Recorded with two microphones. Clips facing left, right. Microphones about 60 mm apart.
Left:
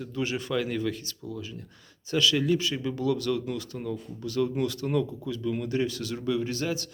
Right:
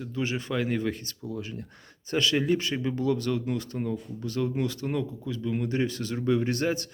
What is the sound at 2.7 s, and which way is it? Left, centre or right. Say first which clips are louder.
Speech: right 1 dB; right.